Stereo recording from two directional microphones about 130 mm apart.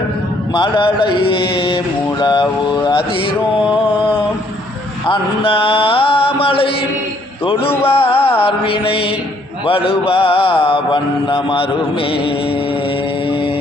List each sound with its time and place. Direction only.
0.5 s mantra: 35° left (ahead or behind)
5.0 s mantra: 40° left (ahead or behind)
7.9 s mantra: 50° left (ahead or behind)
13.2 s mantra: 40° left (ahead or behind)